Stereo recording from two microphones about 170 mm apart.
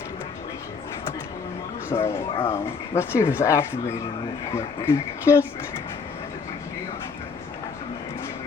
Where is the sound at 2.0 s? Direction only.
15° left (ahead or behind).